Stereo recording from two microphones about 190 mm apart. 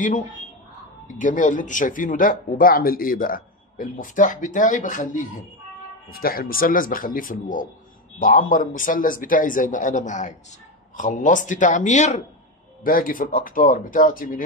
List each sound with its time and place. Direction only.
1.0 s speech: 45° left (ahead or behind)